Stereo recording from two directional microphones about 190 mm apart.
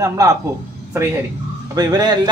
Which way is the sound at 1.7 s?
20° right (ahead or behind).